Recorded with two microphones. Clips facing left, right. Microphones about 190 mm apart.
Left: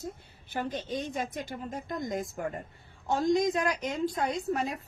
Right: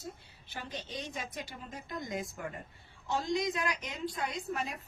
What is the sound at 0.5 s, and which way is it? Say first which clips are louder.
A woman's voice: left 9 dB; 50° left (ahead or behind).